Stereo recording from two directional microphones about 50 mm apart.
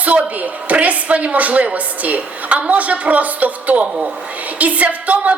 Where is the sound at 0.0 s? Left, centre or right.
Right.